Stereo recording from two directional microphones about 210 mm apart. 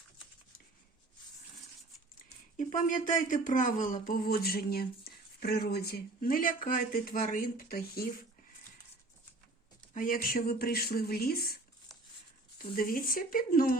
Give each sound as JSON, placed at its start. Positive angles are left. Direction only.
{"t": 2.6, "sound": "speech", "side_deg": 40}
{"t": 9.9, "sound": "speech", "side_deg": 40}
{"t": 12.5, "sound": "speech", "side_deg": 45}